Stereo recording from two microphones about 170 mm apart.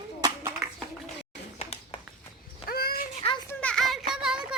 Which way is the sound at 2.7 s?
65° left (ahead or behind).